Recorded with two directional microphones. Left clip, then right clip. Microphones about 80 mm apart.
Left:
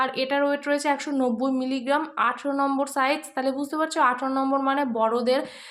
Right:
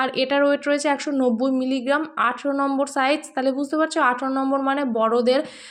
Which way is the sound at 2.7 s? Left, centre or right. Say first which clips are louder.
Right 3 dB; right.